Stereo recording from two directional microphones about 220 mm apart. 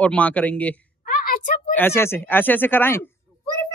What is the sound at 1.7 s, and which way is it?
Speech, 10° left (ahead or behind).